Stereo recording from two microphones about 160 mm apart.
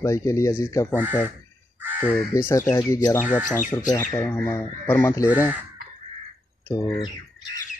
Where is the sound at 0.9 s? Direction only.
10° right (ahead or behind).